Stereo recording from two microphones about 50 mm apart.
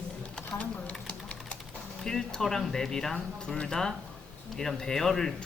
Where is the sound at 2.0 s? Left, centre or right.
Centre.